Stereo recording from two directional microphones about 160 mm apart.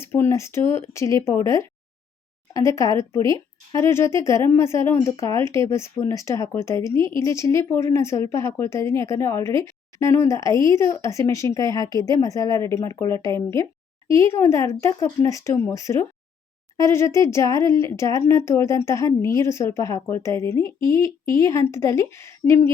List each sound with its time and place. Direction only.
0.0 s speech: 15° left (ahead or behind)